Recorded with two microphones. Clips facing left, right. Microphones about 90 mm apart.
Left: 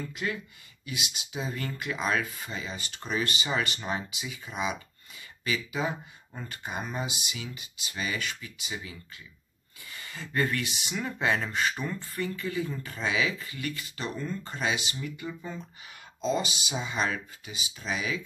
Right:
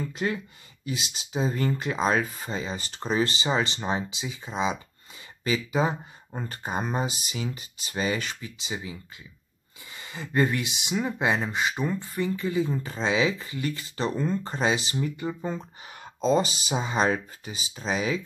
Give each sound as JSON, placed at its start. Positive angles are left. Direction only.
{"t": 0.1, "sound": "speech", "side_deg": -30}
{"t": 9.9, "sound": "speech", "side_deg": -20}